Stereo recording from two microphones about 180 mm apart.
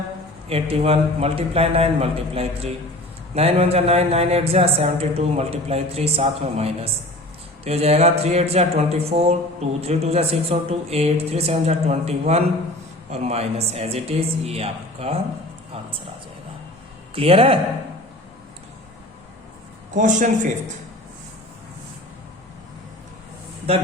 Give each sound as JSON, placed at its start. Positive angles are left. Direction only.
{"t": 0.4, "sound": "speech", "side_deg": -35}
{"t": 17.2, "sound": "speech", "side_deg": -30}
{"t": 20.0, "sound": "a man's voice", "side_deg": -45}